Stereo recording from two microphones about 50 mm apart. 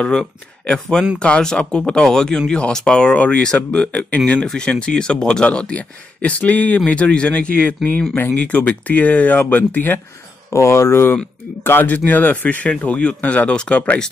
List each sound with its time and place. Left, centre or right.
0.1 s speech: centre; by 9.9 s left
10.5 s speech: left
11.6 s speech: left